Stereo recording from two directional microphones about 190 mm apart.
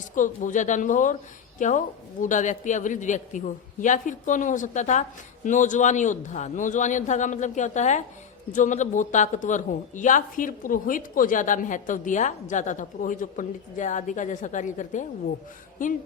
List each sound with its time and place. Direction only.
0.1 s a woman's voice: 45° left (ahead or behind)